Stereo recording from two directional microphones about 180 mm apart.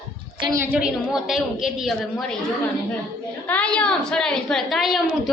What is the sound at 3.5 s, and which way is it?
A woman's voice, 5° left (ahead or behind).